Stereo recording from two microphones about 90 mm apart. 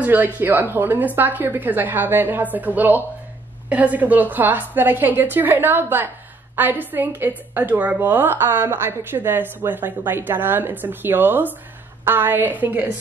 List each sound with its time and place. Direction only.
0.0 s a woman's voice: 20° right (ahead or behind)